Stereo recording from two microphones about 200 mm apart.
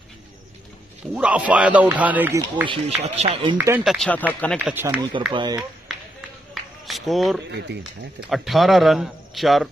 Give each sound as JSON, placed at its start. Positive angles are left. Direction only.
{"t": 1.1, "sound": "a man's voice", "side_deg": -5}
{"t": 3.2, "sound": "speech", "side_deg": -30}
{"t": 3.5, "sound": "a man's voice", "side_deg": -10}
{"t": 3.8, "sound": "a man's voice", "side_deg": 0}
{"t": 4.6, "sound": "a man's voice", "side_deg": -10}
{"t": 5.3, "sound": "speech", "side_deg": -25}
{"t": 6.5, "sound": "a sound", "side_deg": 0}
{"t": 7.5, "sound": "speech", "side_deg": -60}
{"t": 8.3, "sound": "a man's voice", "side_deg": 0}